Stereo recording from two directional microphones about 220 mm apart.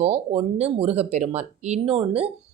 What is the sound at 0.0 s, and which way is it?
Speech, 30° right (ahead or behind).